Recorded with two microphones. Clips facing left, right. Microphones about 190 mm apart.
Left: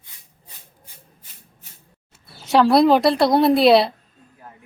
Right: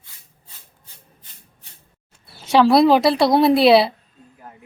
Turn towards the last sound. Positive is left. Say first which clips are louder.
# right 1 dB
turn(degrees=0)  # may be behind; listen again after turning